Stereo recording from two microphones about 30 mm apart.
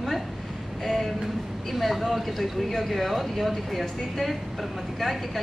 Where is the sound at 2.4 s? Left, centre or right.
Centre.